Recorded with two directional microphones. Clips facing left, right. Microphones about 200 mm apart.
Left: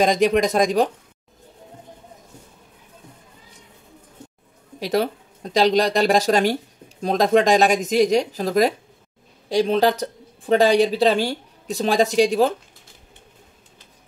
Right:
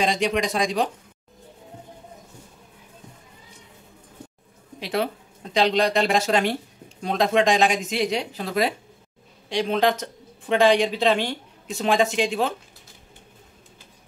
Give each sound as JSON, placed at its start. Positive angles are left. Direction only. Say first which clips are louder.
{"t": 0.0, "sound": "speech", "louder": "left 6 dB", "side_deg": 45}
{"t": 4.7, "sound": "speech", "louder": "left 4 dB", "side_deg": 40}